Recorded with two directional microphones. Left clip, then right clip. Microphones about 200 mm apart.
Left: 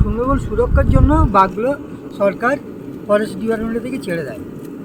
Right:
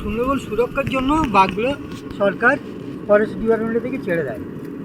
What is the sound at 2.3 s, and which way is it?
A man's voice, 30° left (ahead or behind).